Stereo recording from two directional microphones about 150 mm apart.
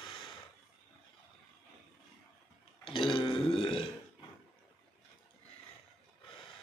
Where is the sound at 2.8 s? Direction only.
35° left (ahead or behind).